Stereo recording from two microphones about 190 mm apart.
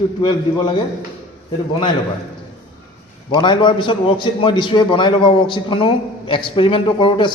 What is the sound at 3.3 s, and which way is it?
A man's voice, 25° left (ahead or behind).